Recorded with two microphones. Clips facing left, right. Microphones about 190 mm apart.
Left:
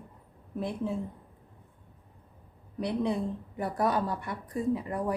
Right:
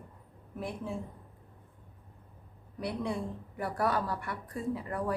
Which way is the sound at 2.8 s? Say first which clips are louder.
Left 5 dB; 20° left (ahead or behind).